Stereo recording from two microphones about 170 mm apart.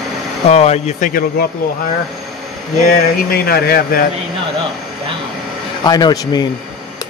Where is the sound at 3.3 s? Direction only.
65° left (ahead or behind).